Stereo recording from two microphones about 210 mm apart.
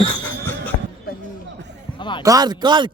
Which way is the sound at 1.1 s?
45° left (ahead or behind).